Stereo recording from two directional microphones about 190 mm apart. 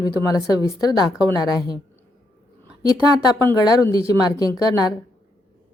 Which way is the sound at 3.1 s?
20° left (ahead or behind).